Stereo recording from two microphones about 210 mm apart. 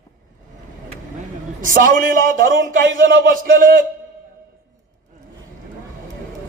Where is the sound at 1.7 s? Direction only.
40° right (ahead or behind).